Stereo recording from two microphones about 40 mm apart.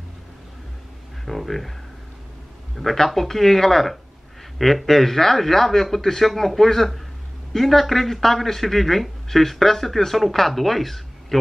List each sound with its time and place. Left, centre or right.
1.2 s speech: centre
2.8 s speech: centre